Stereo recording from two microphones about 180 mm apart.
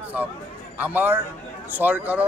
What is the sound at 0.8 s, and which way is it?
Speech, 10° right (ahead or behind).